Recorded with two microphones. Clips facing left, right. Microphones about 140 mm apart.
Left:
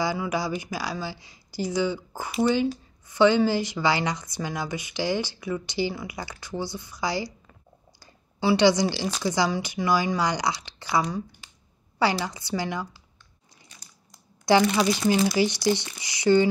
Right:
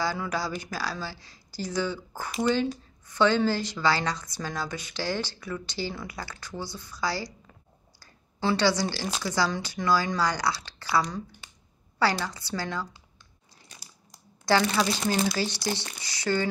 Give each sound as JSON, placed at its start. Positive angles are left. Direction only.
{"t": 0.0, "sound": "speech", "side_deg": 15}
{"t": 8.0, "sound": "a sound", "side_deg": 15}
{"t": 9.2, "sound": "speech", "side_deg": 15}
{"t": 14.4, "sound": "speech", "side_deg": 15}